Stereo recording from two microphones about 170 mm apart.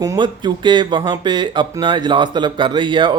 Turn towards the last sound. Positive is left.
turn(degrees=-30)  # may be behind; listen again after turning